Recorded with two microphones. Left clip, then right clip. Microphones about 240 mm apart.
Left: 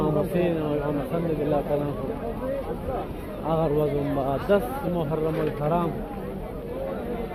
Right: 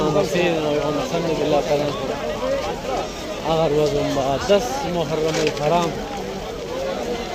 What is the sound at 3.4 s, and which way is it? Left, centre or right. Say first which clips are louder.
Speech: right 5 dB; centre.